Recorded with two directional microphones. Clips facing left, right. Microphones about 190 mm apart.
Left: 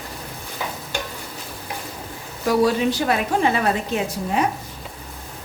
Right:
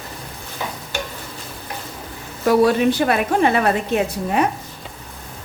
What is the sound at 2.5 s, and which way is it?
A woman's voice, 60° right (ahead or behind).